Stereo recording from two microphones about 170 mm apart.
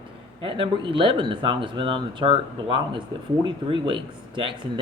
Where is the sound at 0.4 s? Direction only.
30° right (ahead or behind).